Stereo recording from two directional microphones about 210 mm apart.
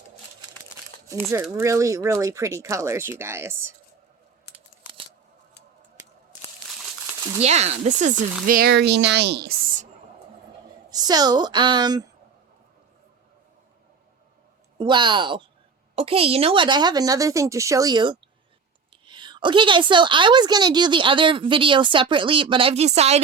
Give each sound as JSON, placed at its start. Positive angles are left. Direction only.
{"t": 1.3, "sound": "speech", "side_deg": -15}
{"t": 4.5, "sound": "scissors", "side_deg": -25}
{"t": 7.4, "sound": "speech", "side_deg": -30}
{"t": 10.9, "sound": "a woman's voice", "side_deg": -20}
{"t": 14.8, "sound": "a woman's voice", "side_deg": -20}